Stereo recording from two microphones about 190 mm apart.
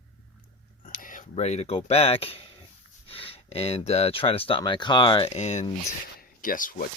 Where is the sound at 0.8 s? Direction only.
45° left (ahead or behind).